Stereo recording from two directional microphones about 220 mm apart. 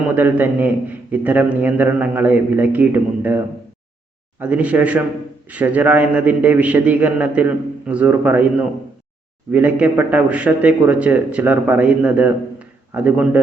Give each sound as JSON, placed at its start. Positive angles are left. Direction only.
{"t": 0.2, "sound": "speech", "side_deg": -10}